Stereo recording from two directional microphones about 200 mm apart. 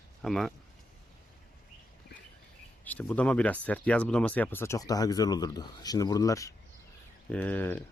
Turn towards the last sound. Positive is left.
turn(degrees=10)  # may be behind; listen again after turning